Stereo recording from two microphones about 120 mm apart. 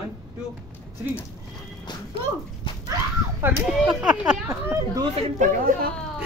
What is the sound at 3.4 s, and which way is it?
Speech, 20° right (ahead or behind).